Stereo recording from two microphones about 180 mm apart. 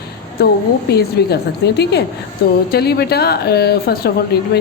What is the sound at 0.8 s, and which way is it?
A woman's voice, 65° left (ahead or behind).